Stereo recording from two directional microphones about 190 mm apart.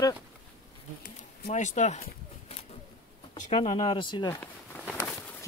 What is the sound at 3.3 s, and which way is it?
Speech, 35° left (ahead or behind).